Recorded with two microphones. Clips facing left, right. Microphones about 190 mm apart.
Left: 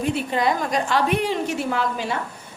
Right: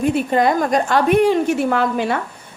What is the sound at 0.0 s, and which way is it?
A woman's voice, 50° right (ahead or behind).